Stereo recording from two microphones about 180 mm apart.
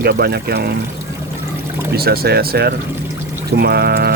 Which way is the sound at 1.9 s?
60° right (ahead or behind).